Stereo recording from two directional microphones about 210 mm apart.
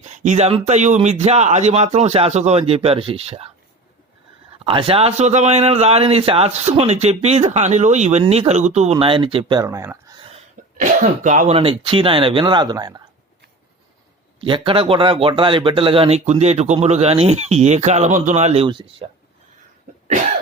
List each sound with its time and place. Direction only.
0.0 s speech: 35° right (ahead or behind)
4.6 s a man's voice: 25° right (ahead or behind)
10.8 s a man's voice: 35° right (ahead or behind); by 13.0 s 20° right (ahead or behind)
14.4 s a man's voice: 25° right (ahead or behind)